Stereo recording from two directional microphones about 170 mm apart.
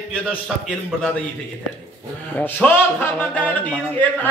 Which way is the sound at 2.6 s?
15° left (ahead or behind).